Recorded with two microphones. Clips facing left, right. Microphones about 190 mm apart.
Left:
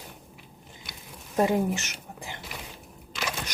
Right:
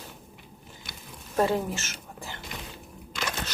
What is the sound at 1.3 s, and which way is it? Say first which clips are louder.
Speech: left 2 dB; 15° left (ahead or behind).